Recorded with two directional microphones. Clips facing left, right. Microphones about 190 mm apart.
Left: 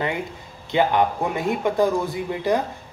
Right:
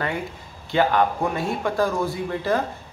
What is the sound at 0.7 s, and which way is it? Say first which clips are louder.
Speech: even; 20° left (ahead or behind).